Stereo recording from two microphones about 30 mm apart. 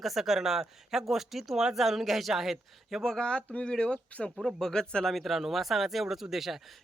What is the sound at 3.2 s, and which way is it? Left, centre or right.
Speech, left.